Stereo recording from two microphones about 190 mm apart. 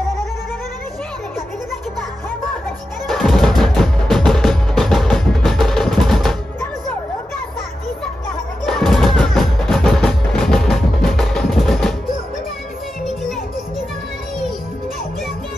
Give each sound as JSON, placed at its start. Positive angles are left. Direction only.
{"t": 3.1, "sound": "music", "side_deg": 0}
{"t": 8.6, "sound": "music", "side_deg": 0}